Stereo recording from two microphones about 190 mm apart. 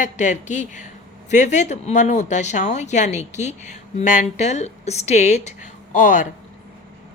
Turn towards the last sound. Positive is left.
turn(degrees=40)  # may be behind; listen again after turning